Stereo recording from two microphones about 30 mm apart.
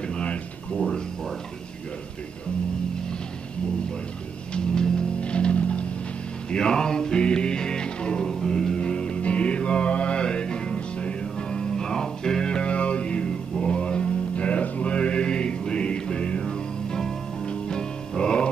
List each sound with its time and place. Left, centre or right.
0.1 s a sound: left
4.6 s music: left
5.2 s music: left
6.5 s music: left
8.7 s music: left
12.4 s music: left
14.3 s music: left